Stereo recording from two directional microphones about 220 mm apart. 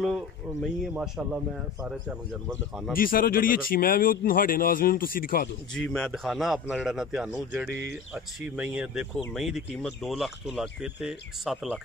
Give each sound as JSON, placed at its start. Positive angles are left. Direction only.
{"t": 0.0, "sound": "speech", "side_deg": 0}
{"t": 3.0, "sound": "speech", "side_deg": 40}
{"t": 5.8, "sound": "speech", "side_deg": 5}